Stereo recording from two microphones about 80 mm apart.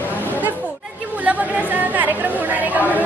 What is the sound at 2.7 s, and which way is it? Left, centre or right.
Speech, right.